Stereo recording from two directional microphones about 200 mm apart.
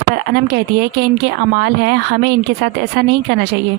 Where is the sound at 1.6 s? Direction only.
55° right (ahead or behind).